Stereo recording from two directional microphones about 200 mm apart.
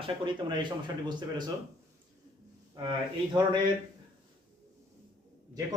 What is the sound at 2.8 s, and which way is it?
Speech, 20° right (ahead or behind).